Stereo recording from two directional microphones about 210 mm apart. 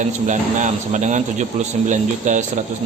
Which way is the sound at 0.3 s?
35° right (ahead or behind).